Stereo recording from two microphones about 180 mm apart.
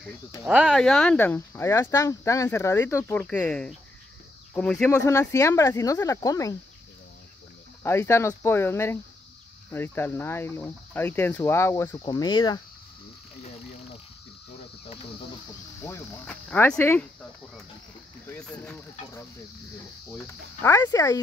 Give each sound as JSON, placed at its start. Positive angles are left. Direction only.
{"t": 0.4, "sound": "speech", "side_deg": -5}
{"t": 5.0, "sound": "speech", "side_deg": 15}
{"t": 7.8, "sound": "speech", "side_deg": 15}
{"t": 12.0, "sound": "speech", "side_deg": 25}
{"t": 15.8, "sound": "speech", "side_deg": 10}
{"t": 18.2, "sound": "speech", "side_deg": 10}